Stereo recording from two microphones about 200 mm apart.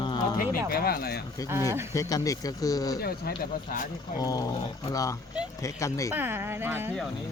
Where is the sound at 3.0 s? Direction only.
50° left (ahead or behind).